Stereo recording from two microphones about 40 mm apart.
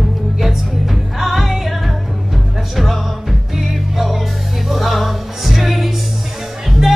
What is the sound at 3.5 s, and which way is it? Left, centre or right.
Music, centre.